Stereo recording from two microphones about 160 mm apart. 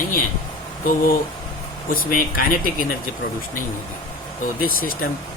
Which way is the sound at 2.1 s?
60° left (ahead or behind).